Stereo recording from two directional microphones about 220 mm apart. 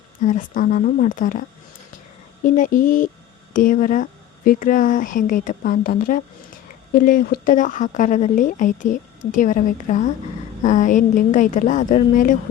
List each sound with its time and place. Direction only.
0.2 s speech: 35° left (ahead or behind)
2.6 s speech: 40° left (ahead or behind)